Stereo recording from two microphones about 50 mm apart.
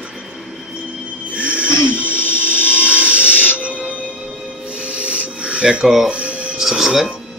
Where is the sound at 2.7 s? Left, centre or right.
Right.